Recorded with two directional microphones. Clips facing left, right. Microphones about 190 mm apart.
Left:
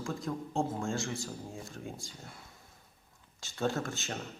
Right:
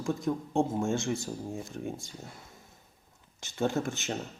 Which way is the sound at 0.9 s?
Centre (ahead or behind).